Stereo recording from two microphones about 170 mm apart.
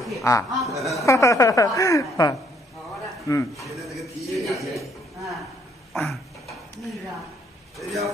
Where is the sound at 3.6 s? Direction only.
Centre (ahead or behind).